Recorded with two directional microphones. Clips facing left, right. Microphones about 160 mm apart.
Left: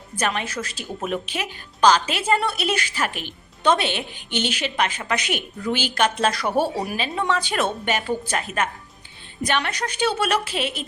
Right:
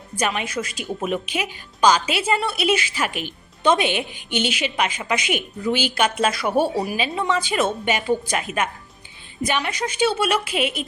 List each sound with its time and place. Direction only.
0.2 s a woman's voice: 10° right (ahead or behind)
10.5 s a woman's voice: 35° left (ahead or behind)